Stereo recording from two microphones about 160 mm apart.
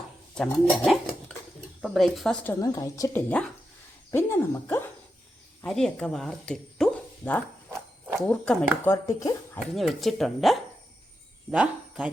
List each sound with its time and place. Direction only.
0.3 s speech: 5° left (ahead or behind)
5.6 s speech: 5° left (ahead or behind)
8.8 s speech: 15° left (ahead or behind)
9.7 s speech: centre (ahead or behind)